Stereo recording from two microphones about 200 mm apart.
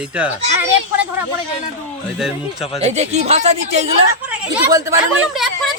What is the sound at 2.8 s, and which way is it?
Speech, 35° right (ahead or behind).